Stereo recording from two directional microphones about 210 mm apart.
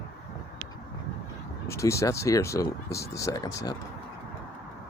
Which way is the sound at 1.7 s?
15° left (ahead or behind).